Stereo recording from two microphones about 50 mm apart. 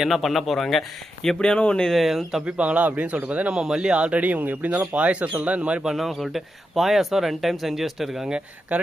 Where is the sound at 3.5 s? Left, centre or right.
Centre.